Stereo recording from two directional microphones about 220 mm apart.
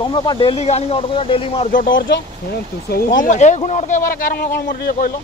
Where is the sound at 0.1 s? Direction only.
20° left (ahead or behind); by 5.1 s 45° left (ahead or behind).